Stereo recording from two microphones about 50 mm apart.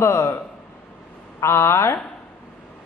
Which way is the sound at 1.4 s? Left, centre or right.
Left.